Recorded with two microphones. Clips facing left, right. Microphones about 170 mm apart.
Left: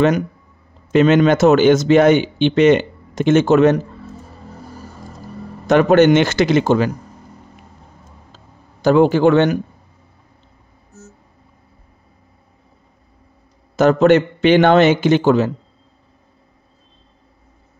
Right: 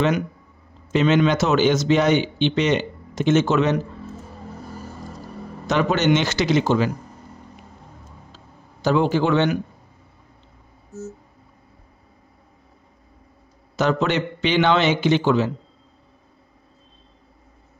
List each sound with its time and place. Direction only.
0.9 s speech: 50° left (ahead or behind)
5.7 s speech: 55° left (ahead or behind)
8.8 s speech: 55° left (ahead or behind)
13.7 s speech: 50° left (ahead or behind)